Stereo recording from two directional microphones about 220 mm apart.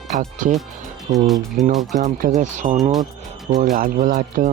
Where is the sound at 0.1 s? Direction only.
35° right (ahead or behind).